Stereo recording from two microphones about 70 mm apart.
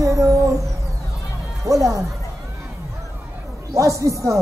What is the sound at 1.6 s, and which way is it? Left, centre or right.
Music, right.